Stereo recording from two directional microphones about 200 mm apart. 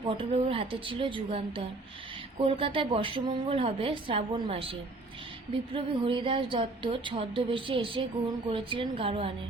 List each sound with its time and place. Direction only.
0.0 s speech: 25° right (ahead or behind)